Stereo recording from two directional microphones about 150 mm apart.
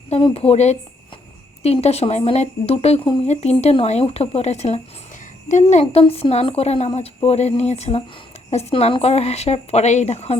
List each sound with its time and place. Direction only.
0.1 s a woman's voice: 40° left (ahead or behind)